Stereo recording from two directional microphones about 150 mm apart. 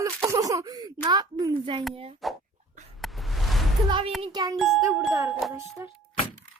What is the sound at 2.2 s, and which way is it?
Speech, centre (ahead or behind).